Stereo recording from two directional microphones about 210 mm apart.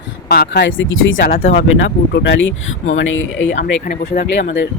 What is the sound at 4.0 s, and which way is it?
Speech, 50° left (ahead or behind).